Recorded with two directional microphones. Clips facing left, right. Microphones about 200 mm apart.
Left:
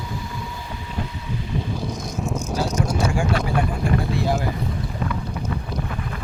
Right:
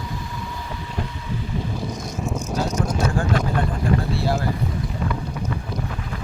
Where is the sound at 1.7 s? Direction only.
Centre (ahead or behind).